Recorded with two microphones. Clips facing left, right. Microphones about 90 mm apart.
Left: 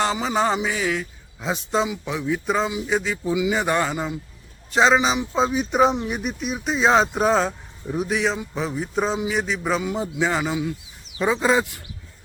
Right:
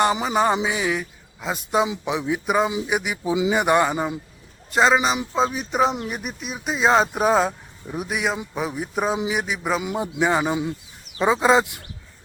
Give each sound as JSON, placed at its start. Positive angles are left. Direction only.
{"t": 0.0, "sound": "speech", "side_deg": -15}
{"t": 1.4, "sound": "speech", "side_deg": -5}
{"t": 1.8, "sound": "speech", "side_deg": -20}
{"t": 3.3, "sound": "speech", "side_deg": -25}
{"t": 4.7, "sound": "speech", "side_deg": 0}